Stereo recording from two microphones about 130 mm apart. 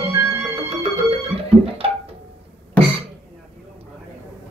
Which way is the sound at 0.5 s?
50° right (ahead or behind).